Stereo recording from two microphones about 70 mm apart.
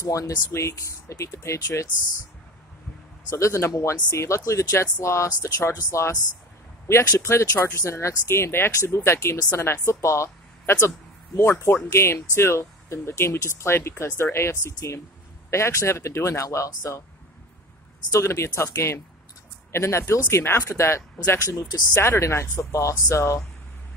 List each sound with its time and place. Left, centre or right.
0.0 s speech: left
3.3 s speech: left
10.6 s a sound: left
11.5 s speech: left
18.1 s speech: left